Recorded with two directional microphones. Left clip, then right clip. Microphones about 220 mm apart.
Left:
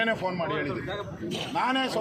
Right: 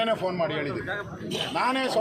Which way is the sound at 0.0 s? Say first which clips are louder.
Right 2 dB; 10° right (ahead or behind).